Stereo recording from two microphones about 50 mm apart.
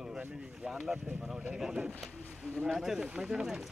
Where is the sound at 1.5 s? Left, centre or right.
Centre.